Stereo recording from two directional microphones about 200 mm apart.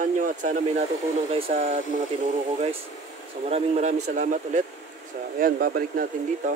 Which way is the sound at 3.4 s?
30° right (ahead or behind).